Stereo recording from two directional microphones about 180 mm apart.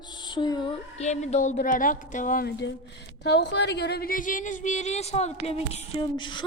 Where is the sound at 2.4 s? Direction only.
70° left (ahead or behind); by 6.0 s 35° left (ahead or behind).